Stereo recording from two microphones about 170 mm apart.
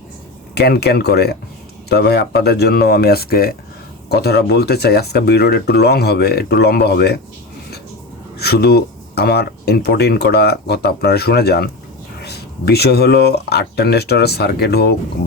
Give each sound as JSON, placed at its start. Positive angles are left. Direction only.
{"t": 0.5, "sound": "speech", "side_deg": 70}
{"t": 8.4, "sound": "speech", "side_deg": 70}